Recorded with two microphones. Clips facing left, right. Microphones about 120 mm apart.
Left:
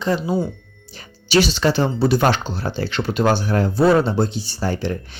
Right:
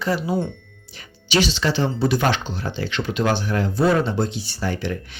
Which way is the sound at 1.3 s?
45° left (ahead or behind).